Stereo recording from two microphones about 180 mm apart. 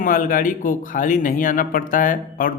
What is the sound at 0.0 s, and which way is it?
A man's voice, 50° left (ahead or behind).